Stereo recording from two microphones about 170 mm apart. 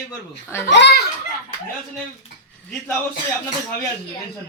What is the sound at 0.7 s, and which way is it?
Speech, 85° left.